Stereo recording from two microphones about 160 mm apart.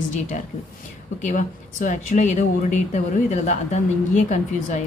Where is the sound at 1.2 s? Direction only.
50° left (ahead or behind).